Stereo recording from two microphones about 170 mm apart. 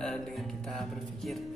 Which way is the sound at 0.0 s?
Centre (ahead or behind).